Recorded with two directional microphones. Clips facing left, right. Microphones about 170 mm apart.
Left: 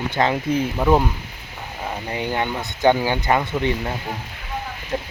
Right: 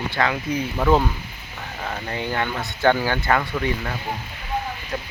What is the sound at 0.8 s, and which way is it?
Speech, 10° left (ahead or behind).